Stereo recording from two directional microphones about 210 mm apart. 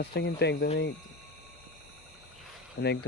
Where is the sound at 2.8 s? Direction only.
60° left (ahead or behind).